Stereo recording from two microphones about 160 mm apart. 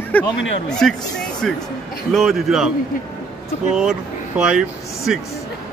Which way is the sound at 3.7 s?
5° right (ahead or behind).